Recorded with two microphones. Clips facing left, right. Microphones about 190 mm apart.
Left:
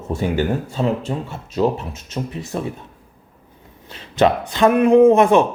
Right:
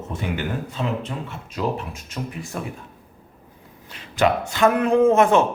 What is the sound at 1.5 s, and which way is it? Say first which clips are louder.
A man's voice: left 6 dB; 25° left (ahead or behind).